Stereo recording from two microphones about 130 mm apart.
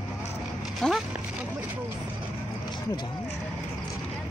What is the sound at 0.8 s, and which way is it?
Speech, 5° left (ahead or behind).